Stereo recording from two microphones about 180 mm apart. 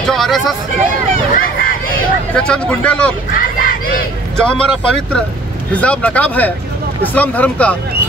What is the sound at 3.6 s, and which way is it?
Crowd, 50° left (ahead or behind).